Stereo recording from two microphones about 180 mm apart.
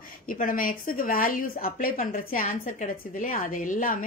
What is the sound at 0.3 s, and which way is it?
A woman's voice, 50° left (ahead or behind).